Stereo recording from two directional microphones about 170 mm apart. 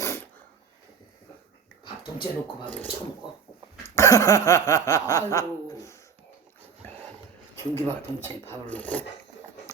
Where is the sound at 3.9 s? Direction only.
15° left (ahead or behind).